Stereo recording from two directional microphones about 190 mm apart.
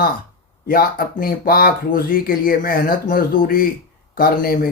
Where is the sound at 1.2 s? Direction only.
50° left (ahead or behind).